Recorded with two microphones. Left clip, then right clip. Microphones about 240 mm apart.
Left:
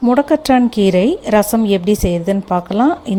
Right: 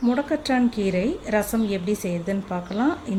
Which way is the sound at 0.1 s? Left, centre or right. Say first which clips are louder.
Left 13 dB; left.